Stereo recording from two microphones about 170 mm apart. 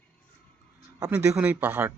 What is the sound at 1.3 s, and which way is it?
Speech, 10° right (ahead or behind).